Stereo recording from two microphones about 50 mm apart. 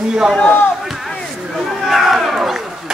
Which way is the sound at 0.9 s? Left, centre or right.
Centre.